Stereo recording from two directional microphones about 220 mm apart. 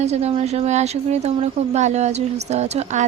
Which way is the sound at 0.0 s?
30° right (ahead or behind).